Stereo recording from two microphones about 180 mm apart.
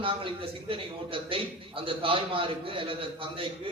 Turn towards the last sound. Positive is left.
turn(degrees=-30)  # may be behind; listen again after turning